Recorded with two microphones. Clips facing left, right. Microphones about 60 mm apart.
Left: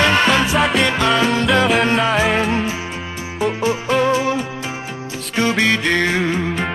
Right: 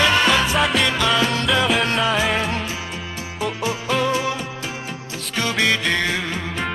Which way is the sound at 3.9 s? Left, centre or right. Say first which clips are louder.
Left 4 dB; left.